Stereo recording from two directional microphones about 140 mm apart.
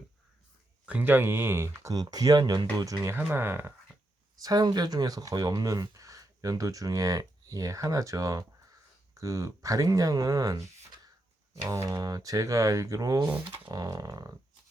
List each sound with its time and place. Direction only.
0.9 s speech: 10° right (ahead or behind)
4.4 s speech: 30° right (ahead or behind)